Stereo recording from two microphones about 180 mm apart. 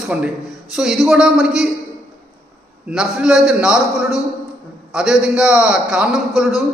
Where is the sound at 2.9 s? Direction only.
5° right (ahead or behind).